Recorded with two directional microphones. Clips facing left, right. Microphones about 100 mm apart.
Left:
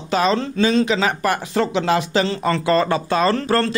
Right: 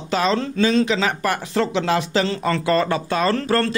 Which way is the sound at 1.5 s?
15° left (ahead or behind).